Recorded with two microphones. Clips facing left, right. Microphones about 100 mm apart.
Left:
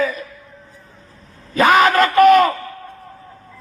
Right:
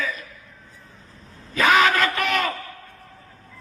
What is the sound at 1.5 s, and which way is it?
Speech, 50° left (ahead or behind).